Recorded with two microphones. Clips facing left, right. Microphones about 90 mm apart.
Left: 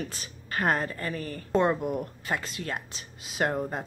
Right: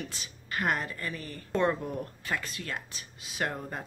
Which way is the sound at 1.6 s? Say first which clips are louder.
Left 3 dB; 20° left (ahead or behind).